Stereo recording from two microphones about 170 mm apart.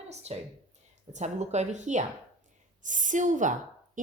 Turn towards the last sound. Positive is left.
turn(degrees=-50)  # may be behind; listen again after turning